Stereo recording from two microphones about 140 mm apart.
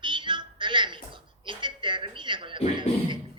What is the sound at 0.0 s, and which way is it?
Music, 35° right (ahead or behind).